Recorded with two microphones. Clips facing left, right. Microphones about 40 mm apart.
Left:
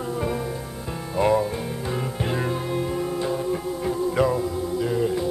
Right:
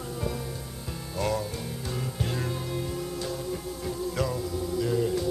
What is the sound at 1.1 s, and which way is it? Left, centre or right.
Music, left.